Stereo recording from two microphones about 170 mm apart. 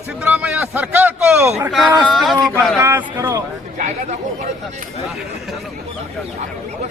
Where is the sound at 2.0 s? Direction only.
Centre (ahead or behind).